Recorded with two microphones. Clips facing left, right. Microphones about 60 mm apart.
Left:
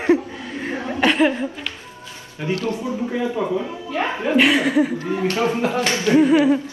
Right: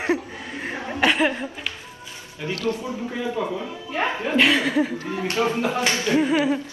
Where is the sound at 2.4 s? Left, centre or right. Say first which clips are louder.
Left 3 dB; left.